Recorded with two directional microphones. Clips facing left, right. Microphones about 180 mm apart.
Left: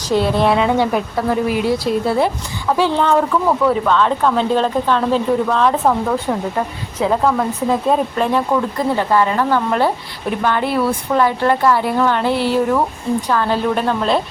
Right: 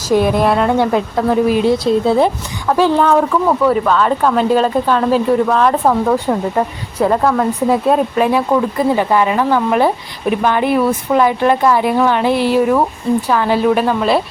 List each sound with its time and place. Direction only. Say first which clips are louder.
0.1 s speech: right 3 dB; 15° right (ahead or behind)
0.4 s a woman's voice: right 1 dB; centre (ahead or behind)
1.3 s speech: right 5 dB; 20° right (ahead or behind)
2.7 s speech: right 3 dB; 10° right (ahead or behind)